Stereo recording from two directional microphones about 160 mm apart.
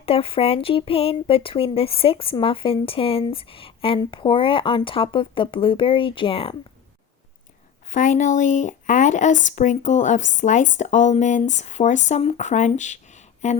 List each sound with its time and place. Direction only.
0.0 s speech: 35° left (ahead or behind)
7.9 s a woman's voice: 50° left (ahead or behind)